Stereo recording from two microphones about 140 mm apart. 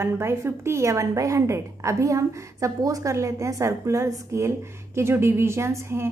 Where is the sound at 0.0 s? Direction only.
20° right (ahead or behind).